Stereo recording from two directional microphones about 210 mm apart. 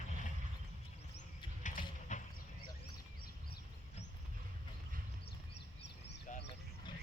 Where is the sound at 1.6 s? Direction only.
35° left (ahead or behind).